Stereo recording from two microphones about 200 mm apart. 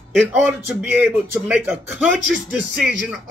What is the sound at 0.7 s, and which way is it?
Speech, 10° right (ahead or behind).